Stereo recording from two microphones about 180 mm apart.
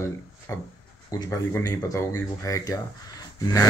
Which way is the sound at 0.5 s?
15° left (ahead or behind).